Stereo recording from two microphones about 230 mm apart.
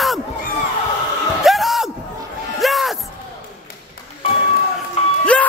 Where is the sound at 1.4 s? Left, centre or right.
Centre.